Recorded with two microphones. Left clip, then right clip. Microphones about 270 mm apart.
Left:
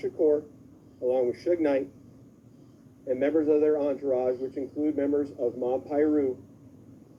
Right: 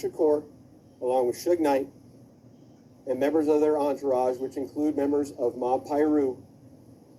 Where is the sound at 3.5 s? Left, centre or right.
Right.